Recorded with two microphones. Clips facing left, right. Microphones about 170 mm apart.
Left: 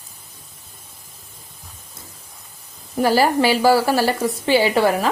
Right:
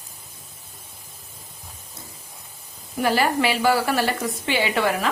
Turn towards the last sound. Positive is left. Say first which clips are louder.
# left 5 dB
turn(degrees=35)  # may be behind; listen again after turning